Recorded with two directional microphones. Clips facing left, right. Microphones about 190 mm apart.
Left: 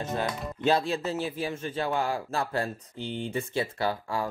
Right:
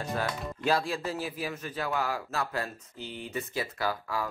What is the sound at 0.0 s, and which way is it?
A man's voice, 20° left (ahead or behind).